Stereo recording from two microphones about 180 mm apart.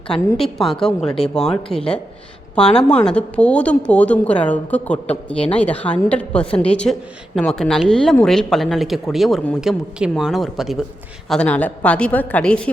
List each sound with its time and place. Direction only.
0.1 s a woman's voice: centre (ahead or behind)